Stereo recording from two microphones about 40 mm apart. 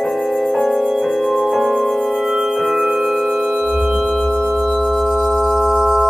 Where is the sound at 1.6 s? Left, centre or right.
Centre.